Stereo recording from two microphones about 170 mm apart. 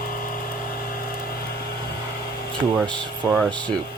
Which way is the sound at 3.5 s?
25° right (ahead or behind).